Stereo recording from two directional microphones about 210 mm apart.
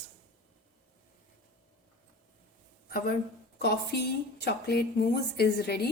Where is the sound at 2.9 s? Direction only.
45° left (ahead or behind).